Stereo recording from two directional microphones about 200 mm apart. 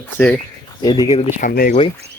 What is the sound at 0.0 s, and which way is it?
Speech, 10° left (ahead or behind).